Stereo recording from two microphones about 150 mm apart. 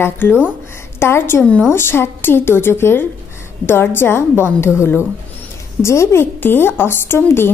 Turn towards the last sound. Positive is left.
turn(degrees=15)  # may be behind; listen again after turning